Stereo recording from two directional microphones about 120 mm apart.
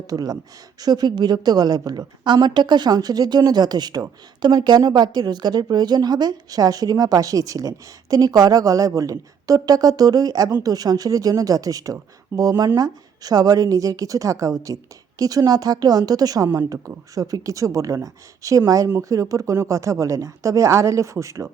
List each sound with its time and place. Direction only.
0.1 s a woman's voice: 30° right (ahead or behind)